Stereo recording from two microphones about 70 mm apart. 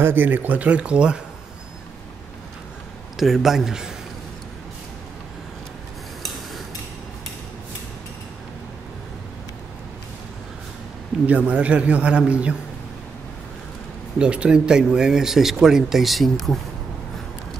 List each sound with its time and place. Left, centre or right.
0.0 s speech: right; by 1.2 s centre
3.2 s speech: centre
11.2 s speech: centre
14.1 s speech: centre